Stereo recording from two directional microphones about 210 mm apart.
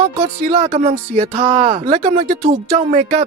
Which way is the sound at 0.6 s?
30° right (ahead or behind).